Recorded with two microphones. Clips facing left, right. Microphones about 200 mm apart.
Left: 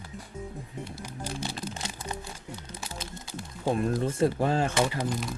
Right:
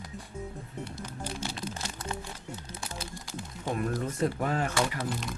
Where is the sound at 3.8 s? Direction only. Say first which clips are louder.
Left 3 dB; 30° left (ahead or behind).